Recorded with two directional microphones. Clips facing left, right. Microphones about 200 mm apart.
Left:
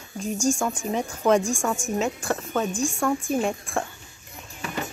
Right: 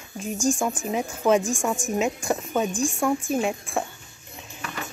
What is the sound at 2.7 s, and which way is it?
Speech, 10° left (ahead or behind).